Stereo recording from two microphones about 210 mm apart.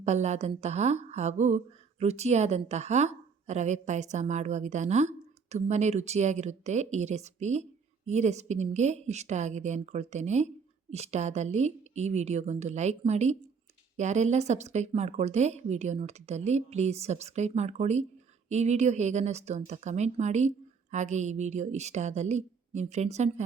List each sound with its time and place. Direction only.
0.0 s a woman's voice: 30° right (ahead or behind)